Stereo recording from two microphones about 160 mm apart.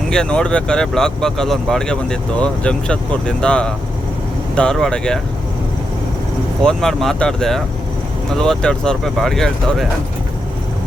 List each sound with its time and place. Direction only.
0.1 s speech: 5° left (ahead or behind)
6.6 s speech: 5° left (ahead or behind)